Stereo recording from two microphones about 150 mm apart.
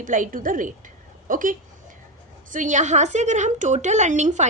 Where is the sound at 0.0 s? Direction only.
60° right (ahead or behind).